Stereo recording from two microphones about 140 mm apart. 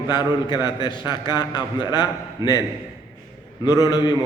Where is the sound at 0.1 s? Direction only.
30° left (ahead or behind).